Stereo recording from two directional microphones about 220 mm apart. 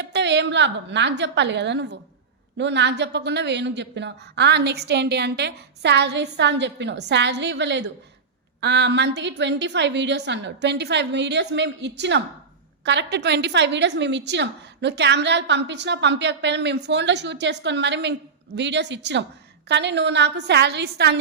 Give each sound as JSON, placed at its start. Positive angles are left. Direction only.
{"t": 0.0, "sound": "a woman's voice", "side_deg": -50}